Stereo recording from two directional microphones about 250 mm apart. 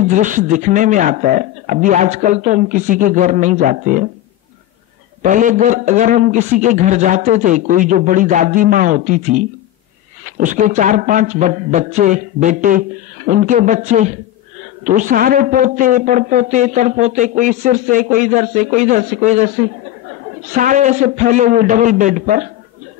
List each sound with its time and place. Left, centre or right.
0.1 s a man's voice: right
5.2 s a man's voice: right
20.4 s a man's voice: right